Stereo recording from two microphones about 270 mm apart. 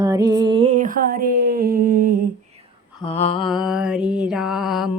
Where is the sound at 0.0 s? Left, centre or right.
Centre; by 2.1 s right.